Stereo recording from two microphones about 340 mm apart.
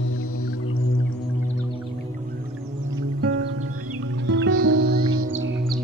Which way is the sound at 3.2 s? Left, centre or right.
Right.